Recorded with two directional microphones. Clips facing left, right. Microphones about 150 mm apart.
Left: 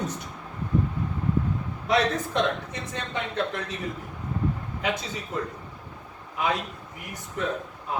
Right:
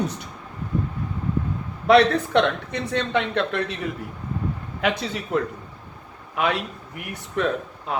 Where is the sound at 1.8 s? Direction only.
70° right (ahead or behind).